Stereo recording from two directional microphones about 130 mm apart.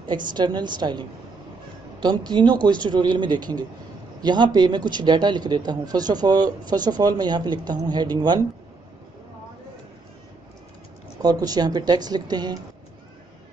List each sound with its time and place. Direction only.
0.1 s speech: 35° right (ahead or behind)
11.1 s speech: 30° right (ahead or behind)